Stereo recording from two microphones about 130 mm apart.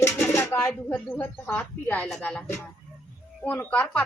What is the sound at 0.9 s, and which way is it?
Speech, 10° left (ahead or behind).